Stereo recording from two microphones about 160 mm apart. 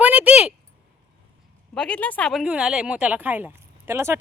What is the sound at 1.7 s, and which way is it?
Speech, 5° left (ahead or behind).